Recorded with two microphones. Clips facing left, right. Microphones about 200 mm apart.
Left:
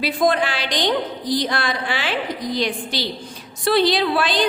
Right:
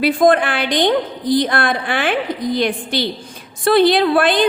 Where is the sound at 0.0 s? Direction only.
55° right (ahead or behind).